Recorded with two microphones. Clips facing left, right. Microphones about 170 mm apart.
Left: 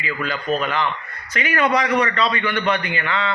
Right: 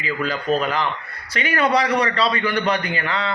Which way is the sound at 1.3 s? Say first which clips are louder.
Even; 35° right (ahead or behind).